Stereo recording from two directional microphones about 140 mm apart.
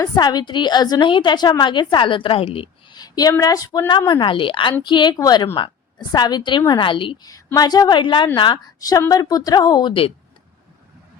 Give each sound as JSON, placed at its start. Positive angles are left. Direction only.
{"t": 0.0, "sound": "a woman's voice", "side_deg": 25}
{"t": 3.0, "sound": "a sound", "side_deg": 25}
{"t": 3.3, "sound": "a woman's voice", "side_deg": 25}